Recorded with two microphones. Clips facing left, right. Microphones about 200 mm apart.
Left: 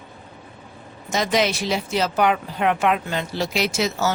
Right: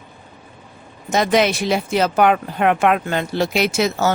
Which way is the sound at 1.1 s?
55° right (ahead or behind).